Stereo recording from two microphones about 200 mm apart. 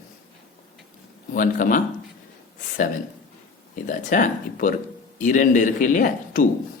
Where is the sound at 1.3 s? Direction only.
40° left (ahead or behind).